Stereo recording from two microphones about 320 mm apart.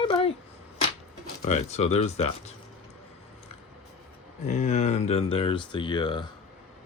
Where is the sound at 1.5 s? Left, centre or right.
Left.